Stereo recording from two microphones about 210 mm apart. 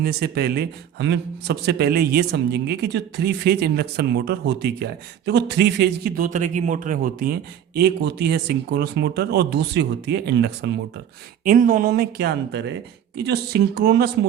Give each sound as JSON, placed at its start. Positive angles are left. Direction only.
{"t": 0.0, "sound": "a man's voice", "side_deg": -50}
{"t": 11.4, "sound": "a man's voice", "side_deg": -40}